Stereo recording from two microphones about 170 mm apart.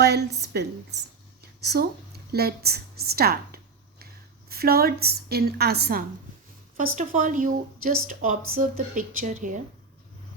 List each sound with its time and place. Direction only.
0.0 s a woman's voice: 75° right (ahead or behind)
6.7 s speech: 50° right (ahead or behind)